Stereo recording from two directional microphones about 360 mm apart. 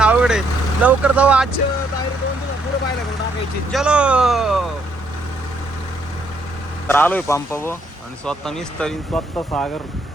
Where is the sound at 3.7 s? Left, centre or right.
Centre.